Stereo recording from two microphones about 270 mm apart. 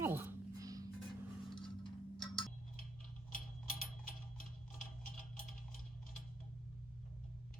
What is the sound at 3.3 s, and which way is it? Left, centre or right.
Tick-tock, left.